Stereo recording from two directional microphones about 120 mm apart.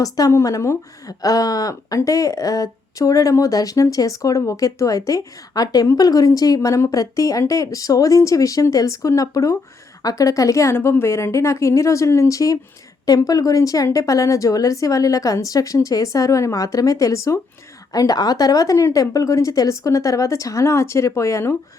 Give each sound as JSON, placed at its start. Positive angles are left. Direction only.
{"t": 0.0, "sound": "speech", "side_deg": 25}